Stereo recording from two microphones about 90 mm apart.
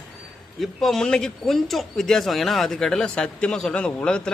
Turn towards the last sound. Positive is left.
turn(degrees=10)  # may be behind; listen again after turning